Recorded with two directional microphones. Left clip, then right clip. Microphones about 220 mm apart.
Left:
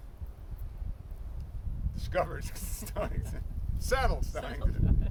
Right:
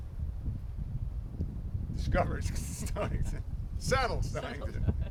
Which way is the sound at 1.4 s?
35° left (ahead or behind).